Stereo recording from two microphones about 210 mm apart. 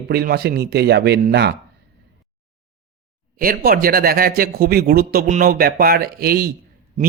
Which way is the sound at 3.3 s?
45° right (ahead or behind).